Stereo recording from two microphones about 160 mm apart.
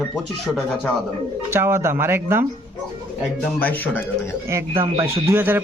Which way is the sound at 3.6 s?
10° left (ahead or behind).